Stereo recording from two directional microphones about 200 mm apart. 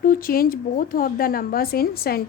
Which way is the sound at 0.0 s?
45° left (ahead or behind).